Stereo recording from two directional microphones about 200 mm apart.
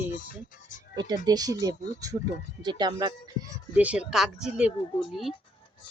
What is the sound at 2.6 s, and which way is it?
Speech, 20° right (ahead or behind).